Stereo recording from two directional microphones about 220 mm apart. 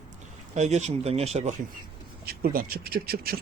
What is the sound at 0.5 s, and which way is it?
Speech, 30° right (ahead or behind).